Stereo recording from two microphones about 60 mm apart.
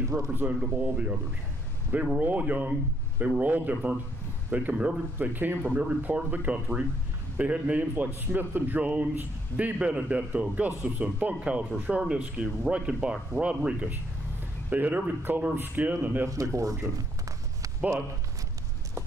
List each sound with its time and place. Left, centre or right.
0.3 s a man's voice: right
5.8 s a man's voice: right
14.7 s a man's voice: right
15.5 s a man's voice: right
16.3 s speech: right
17.7 s speech: right